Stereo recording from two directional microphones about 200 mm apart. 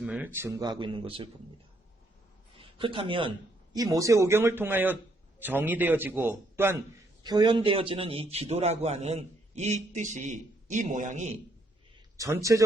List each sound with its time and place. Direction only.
0.0 s speech: 5° right (ahead or behind); by 1.3 s 25° right (ahead or behind)
2.6 s a man's voice: 25° right (ahead or behind)
12.1 s a man's voice: 15° right (ahead or behind)